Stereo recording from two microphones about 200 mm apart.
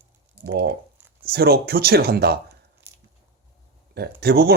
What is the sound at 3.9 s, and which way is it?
Speech, 55° right (ahead or behind).